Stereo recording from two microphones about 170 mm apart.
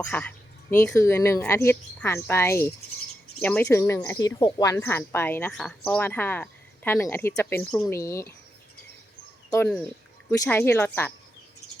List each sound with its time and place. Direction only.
0.1 s a woman's voice: 10° left (ahead or behind)
7.9 s a woman's voice: 15° left (ahead or behind)
10.4 s a woman's voice: 10° left (ahead or behind)